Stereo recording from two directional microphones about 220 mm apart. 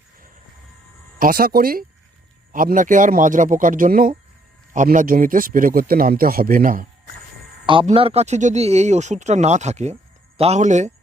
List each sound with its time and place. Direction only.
1.2 s speech: 40° right (ahead or behind)
7.7 s speech: 25° right (ahead or behind)